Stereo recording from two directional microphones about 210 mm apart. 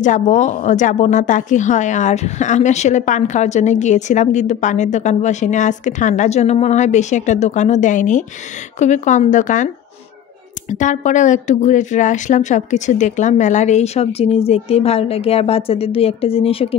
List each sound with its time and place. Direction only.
0.0 s speech: 35° left (ahead or behind)
10.7 s speech: 35° left (ahead or behind)